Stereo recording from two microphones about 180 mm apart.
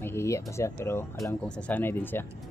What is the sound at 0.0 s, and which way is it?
Speech, 15° left (ahead or behind).